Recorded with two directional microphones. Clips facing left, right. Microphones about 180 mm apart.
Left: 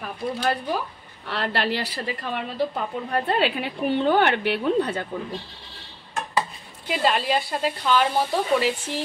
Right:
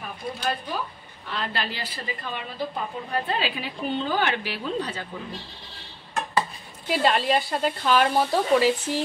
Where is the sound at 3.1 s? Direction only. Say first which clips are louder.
Left 5 dB; 60° left (ahead or behind).